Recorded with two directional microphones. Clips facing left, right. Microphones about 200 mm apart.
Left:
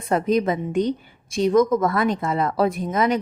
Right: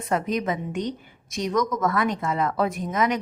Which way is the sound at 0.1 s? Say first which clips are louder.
Left 5 dB; 35° left (ahead or behind).